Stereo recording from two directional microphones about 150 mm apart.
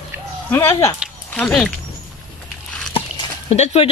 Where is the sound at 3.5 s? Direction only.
45° left (ahead or behind).